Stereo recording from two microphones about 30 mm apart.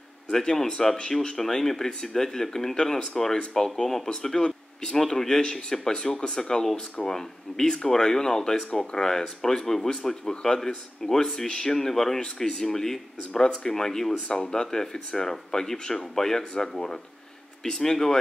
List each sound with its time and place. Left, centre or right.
0.3 s speech: left
4.4 s a sound: left
4.9 s speech: centre
11.4 s speech: left
14.2 s speech: left